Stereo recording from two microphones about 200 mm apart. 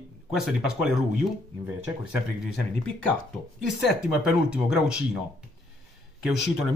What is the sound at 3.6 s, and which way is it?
Speech, 5° right (ahead or behind).